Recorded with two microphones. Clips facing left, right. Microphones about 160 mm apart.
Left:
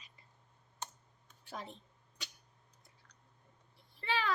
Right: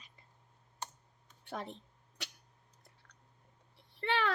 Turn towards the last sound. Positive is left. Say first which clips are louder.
# right 2 dB
turn(degrees=-65)  # may be behind; listen again after turning